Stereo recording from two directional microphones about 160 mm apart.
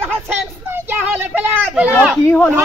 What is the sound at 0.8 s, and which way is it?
Speech, 10° right (ahead or behind).